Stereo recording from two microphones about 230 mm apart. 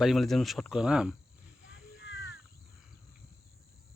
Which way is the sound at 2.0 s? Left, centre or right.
Left.